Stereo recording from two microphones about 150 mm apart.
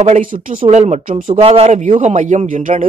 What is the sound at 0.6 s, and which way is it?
Speech, 50° right (ahead or behind).